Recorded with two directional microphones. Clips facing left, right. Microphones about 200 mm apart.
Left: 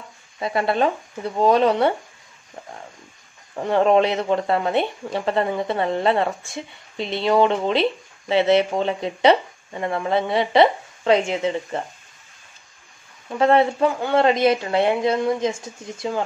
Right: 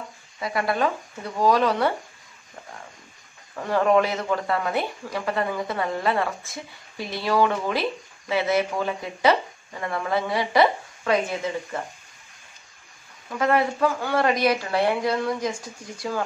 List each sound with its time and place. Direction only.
0.4 s speech: 25° left (ahead or behind)
3.5 s speech: 25° left (ahead or behind)
13.3 s speech: 25° left (ahead or behind)